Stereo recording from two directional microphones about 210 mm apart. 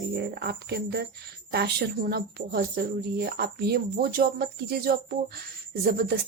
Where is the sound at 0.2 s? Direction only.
50° right (ahead or behind).